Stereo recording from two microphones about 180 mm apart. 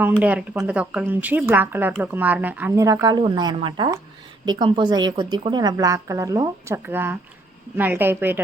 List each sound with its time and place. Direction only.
0.0 s a woman's voice: 10° right (ahead or behind)